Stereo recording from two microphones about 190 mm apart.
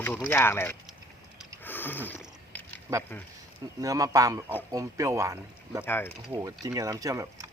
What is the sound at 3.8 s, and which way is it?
Speech, 20° right (ahead or behind).